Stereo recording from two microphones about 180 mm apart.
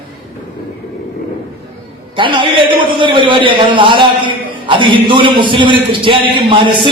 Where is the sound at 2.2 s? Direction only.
25° right (ahead or behind).